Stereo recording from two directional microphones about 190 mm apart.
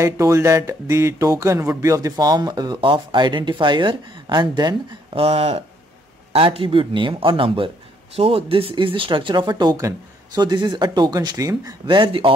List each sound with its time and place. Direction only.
0.0 s speech: 15° right (ahead or behind)